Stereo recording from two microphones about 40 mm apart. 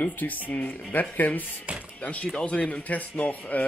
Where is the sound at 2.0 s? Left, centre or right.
Left.